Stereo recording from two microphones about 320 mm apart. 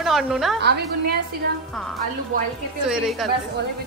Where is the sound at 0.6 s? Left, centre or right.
Right.